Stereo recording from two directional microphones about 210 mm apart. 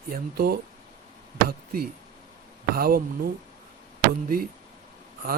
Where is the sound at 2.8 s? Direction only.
45° right (ahead or behind).